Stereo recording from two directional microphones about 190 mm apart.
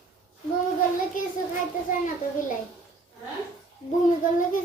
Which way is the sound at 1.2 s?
45° left (ahead or behind).